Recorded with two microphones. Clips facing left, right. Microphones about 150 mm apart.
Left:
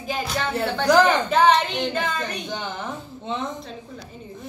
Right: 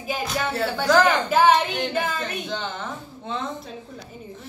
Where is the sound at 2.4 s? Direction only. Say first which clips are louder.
Right 1 dB; 15° left (ahead or behind).